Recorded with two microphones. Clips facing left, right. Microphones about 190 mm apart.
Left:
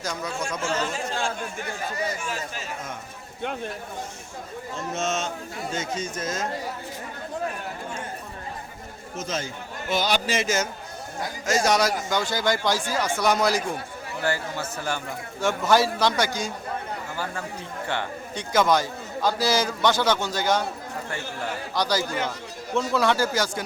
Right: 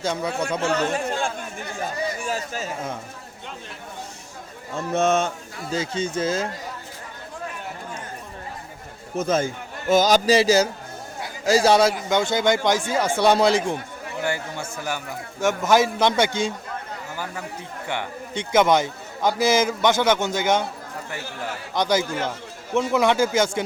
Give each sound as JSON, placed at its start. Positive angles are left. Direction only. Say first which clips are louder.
{"t": 0.0, "sound": "a man's voice", "louder": "right 5 dB", "side_deg": -30}
{"t": 0.6, "sound": "speech", "louder": "right 5 dB", "side_deg": -65}
{"t": 2.2, "sound": "speech", "louder": "right 5 dB", "side_deg": -40}
{"t": 3.4, "sound": "speech", "louder": "left 10 dB", "side_deg": 60}
{"t": 4.9, "sound": "speech", "louder": "right 8 dB", "side_deg": -60}
{"t": 5.7, "sound": "speech", "louder": "right 7 dB", "side_deg": -30}
{"t": 9.1, "sound": "speech", "louder": "right 9 dB", "side_deg": -55}
{"t": 9.9, "sound": "a man's voice", "louder": "right 8 dB", "side_deg": -40}
{"t": 17.8, "sound": "a man's voice", "louder": "right 1 dB", "side_deg": -20}
{"t": 21.8, "sound": "a man's voice", "louder": "right 4 dB", "side_deg": -20}